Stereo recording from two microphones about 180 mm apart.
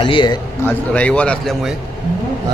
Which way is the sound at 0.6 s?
5° left (ahead or behind).